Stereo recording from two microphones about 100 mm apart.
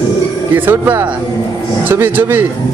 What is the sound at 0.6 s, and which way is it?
Speech, 20° right (ahead or behind).